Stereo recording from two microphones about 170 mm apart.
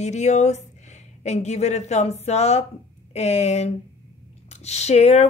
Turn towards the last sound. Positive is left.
turn(degrees=40)  # may be behind; listen again after turning